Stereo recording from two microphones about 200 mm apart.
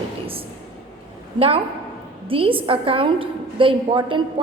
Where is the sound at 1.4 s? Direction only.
30° right (ahead or behind).